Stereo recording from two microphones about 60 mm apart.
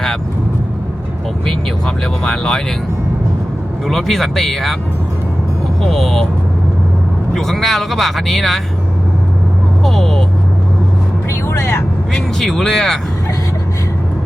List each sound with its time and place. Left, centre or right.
2.2 s speech: centre
3.8 s speech: centre
5.8 s speech: centre
7.3 s speech: centre
9.8 s vehicle: centre
11.4 s vehicle: left
12.1 s speech: centre